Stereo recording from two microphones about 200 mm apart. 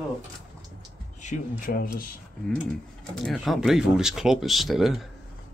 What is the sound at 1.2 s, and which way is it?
Speech, 40° left (ahead or behind).